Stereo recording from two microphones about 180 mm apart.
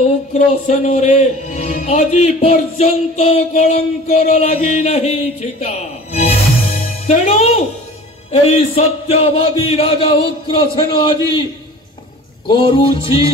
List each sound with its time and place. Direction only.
0.3 s speech: 40° left (ahead or behind)
12.4 s music: 25° left (ahead or behind)